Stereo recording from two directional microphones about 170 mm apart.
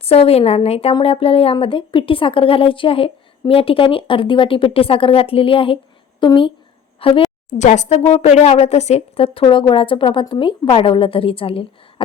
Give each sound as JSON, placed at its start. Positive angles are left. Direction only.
{"t": 0.0, "sound": "a woman's voice", "side_deg": 35}